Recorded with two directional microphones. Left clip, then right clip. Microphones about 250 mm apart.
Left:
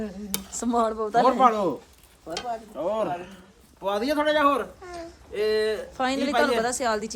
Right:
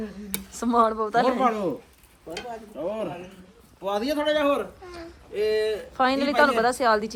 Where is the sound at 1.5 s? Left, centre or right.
Centre.